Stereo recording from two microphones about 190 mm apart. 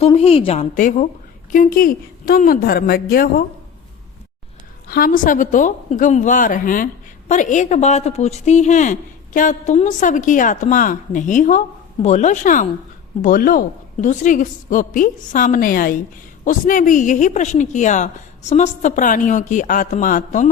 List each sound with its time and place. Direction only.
0.0 s a woman's voice: 30° left (ahead or behind); by 3.4 s 50° left (ahead or behind)
4.9 s a woman's voice: 50° left (ahead or behind)